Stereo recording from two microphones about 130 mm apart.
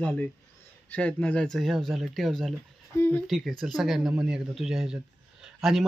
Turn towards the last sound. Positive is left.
turn(degrees=-5)  # may be behind; listen again after turning